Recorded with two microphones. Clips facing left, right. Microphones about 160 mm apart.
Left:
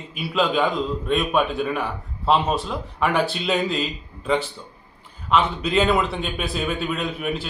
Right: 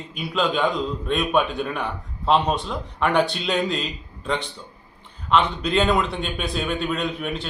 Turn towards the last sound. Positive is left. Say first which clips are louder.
# left 1 dB
turn(degrees=5)  # may be behind; listen again after turning